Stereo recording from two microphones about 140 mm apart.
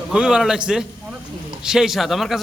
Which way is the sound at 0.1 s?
5° right (ahead or behind).